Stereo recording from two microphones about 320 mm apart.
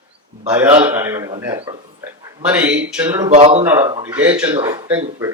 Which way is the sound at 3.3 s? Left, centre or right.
Centre.